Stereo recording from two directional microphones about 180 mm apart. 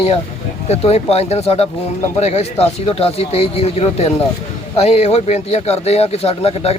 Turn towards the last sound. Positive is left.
turn(degrees=35)  # may be behind; listen again after turning